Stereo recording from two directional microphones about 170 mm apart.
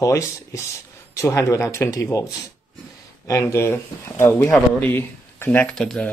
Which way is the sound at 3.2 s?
15° left (ahead or behind).